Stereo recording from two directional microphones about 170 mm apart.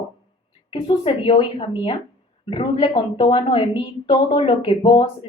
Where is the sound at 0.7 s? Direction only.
30° left (ahead or behind).